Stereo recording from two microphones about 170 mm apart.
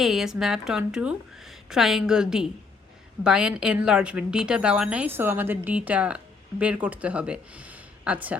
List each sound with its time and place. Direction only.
0.0 s a woman's voice: centre (ahead or behind)